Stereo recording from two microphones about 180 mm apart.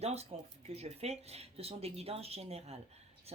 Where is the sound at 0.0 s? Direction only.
35° right (ahead or behind).